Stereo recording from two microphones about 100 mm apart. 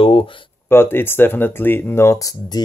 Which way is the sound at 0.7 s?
20° left (ahead or behind).